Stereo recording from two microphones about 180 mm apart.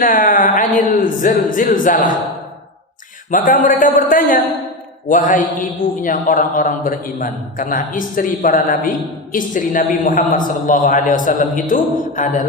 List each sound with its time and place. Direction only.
0.0 s a man's voice: 50° left (ahead or behind)
3.3 s a man's voice: 45° left (ahead or behind)